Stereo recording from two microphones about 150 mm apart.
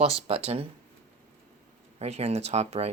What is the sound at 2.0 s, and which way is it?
Speech, 45° right (ahead or behind).